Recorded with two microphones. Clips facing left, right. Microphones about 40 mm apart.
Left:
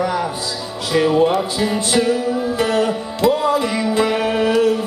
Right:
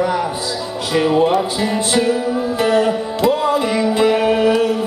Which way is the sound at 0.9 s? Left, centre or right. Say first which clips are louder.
Even; centre.